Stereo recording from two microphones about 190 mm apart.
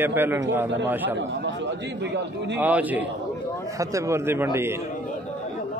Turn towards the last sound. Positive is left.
turn(degrees=-15)  # may be behind; listen again after turning